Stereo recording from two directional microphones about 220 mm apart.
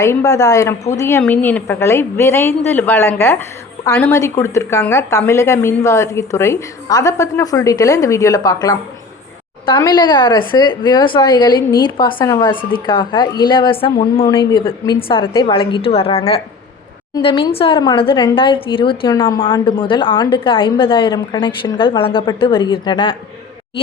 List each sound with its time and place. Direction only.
0.0 s a woman's voice: 15° left (ahead or behind)